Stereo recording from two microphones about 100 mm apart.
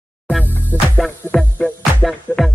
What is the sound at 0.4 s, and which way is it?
Music, 20° right (ahead or behind).